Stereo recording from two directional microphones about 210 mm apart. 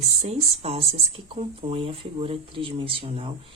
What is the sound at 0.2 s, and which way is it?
Speech, 30° right (ahead or behind).